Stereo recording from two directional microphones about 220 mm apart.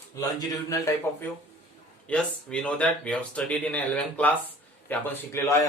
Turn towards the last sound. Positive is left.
turn(degrees=10)  # may be behind; listen again after turning